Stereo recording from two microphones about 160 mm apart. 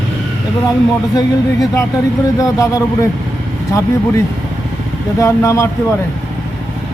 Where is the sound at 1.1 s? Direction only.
25° left (ahead or behind).